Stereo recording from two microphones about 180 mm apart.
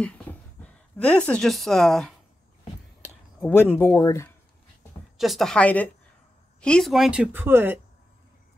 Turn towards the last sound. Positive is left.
turn(degrees=-10)  # may be behind; listen again after turning